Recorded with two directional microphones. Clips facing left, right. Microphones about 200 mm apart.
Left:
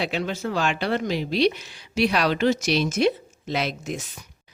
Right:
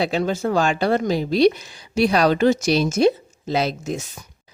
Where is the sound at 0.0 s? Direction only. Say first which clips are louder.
Right 6 dB; 45° right (ahead or behind).